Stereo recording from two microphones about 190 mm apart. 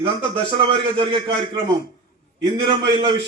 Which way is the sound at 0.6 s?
25° right (ahead or behind).